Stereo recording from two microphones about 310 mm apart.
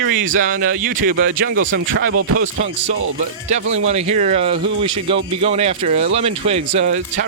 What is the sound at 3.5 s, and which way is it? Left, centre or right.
Speech, right.